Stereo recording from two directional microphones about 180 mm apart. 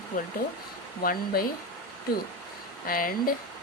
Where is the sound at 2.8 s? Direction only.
50° left (ahead or behind).